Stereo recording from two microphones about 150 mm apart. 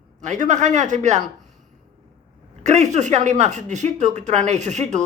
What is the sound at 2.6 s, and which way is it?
Speech, 50° right (ahead or behind).